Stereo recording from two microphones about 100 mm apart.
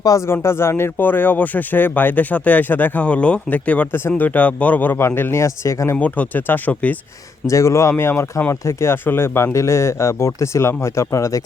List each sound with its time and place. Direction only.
0.0 s speech: 35° left (ahead or behind)
0.3 s speech: 25° left (ahead or behind)
6.0 s speech: 15° left (ahead or behind)
7.4 s speech: 30° left (ahead or behind)